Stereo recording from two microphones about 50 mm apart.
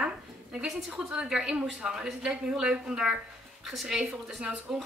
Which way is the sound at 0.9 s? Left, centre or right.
Centre.